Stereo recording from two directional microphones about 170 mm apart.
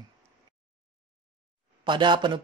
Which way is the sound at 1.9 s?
25° right (ahead or behind).